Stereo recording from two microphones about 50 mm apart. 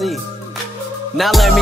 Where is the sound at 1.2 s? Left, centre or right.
Centre.